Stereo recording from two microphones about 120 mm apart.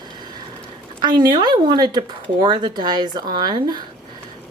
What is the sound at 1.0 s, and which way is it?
A woman's voice, 40° right (ahead or behind).